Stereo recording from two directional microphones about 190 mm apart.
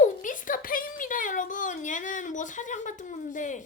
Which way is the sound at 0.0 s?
45° left (ahead or behind).